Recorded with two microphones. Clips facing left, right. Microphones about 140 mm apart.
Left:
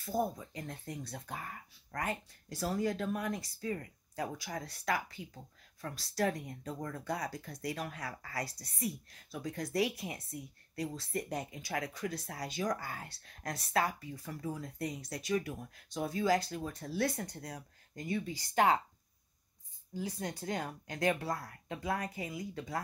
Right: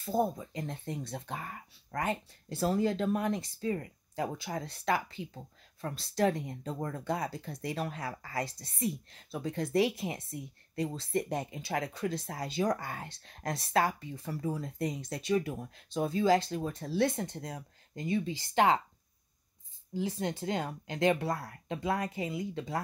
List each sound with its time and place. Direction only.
0.0 s speech: 25° right (ahead or behind)
19.9 s speech: 25° right (ahead or behind)